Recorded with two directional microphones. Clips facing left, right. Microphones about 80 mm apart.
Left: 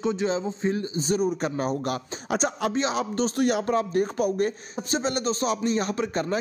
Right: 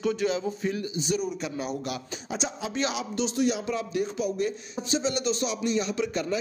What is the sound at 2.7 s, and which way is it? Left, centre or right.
A man's voice, left.